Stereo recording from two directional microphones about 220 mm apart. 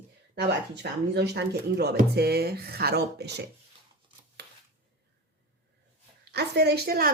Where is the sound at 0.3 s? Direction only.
50° right (ahead or behind).